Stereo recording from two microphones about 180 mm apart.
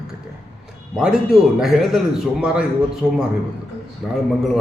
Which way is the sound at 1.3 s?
Centre (ahead or behind).